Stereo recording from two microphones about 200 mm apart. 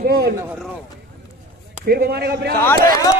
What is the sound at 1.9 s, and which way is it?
Speech, 50° right (ahead or behind).